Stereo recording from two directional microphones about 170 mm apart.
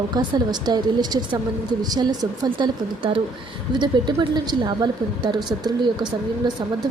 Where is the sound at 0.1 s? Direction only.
25° right (ahead or behind).